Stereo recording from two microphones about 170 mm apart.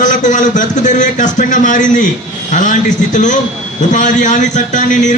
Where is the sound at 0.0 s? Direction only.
50° left (ahead or behind).